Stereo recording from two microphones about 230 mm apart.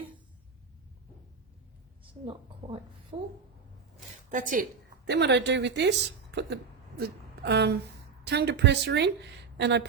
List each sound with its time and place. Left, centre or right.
2.2 s a woman's voice: right
4.3 s a woman's voice: right
5.0 s a woman's voice: right